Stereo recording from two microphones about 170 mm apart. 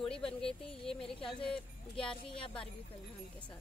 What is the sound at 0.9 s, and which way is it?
Speech, 30° left (ahead or behind).